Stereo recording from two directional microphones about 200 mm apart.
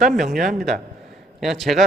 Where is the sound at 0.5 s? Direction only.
Centre (ahead or behind).